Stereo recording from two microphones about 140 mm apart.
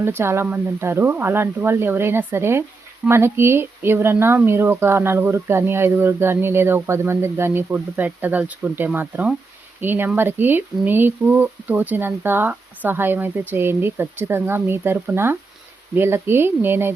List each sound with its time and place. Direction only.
0.0 s speech: 15° right (ahead or behind)